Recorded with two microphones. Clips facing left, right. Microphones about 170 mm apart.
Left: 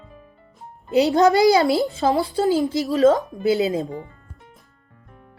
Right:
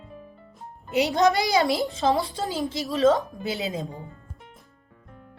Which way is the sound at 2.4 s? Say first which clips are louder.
Left 9 dB; 20° right (ahead or behind).